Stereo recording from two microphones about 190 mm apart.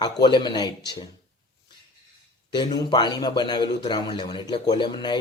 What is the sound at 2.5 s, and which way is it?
Speech, 25° left (ahead or behind).